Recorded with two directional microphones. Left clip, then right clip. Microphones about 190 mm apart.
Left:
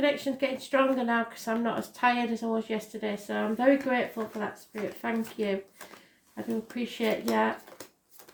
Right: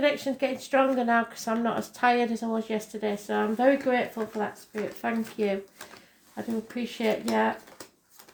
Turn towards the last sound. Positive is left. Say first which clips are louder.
# right 1 dB
turn(degrees=-20)  # may be behind; listen again after turning